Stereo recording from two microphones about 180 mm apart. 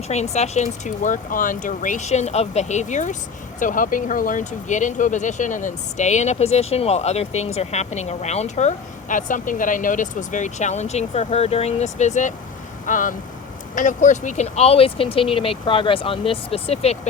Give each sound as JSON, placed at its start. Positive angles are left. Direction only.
{"t": 0.1, "sound": "speech", "side_deg": 40}